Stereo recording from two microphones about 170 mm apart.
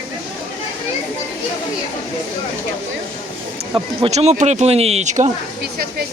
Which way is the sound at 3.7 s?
35° right (ahead or behind).